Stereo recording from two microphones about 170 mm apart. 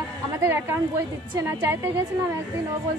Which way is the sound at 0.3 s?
15° right (ahead or behind).